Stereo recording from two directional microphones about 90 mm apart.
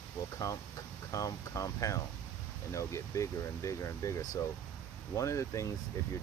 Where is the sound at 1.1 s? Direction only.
40° left (ahead or behind).